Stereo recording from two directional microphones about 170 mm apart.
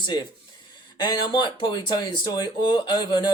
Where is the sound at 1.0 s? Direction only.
25° left (ahead or behind).